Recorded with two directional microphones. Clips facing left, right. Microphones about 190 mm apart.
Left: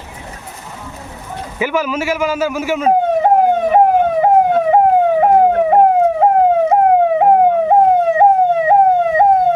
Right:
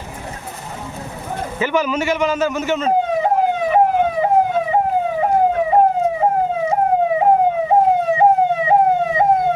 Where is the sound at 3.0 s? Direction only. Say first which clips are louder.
Left 5 dB; 55° left (ahead or behind).